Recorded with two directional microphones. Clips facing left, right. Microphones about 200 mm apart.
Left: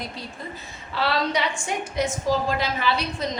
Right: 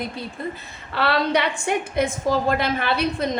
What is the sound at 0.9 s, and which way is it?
A woman's voice, 60° right (ahead or behind).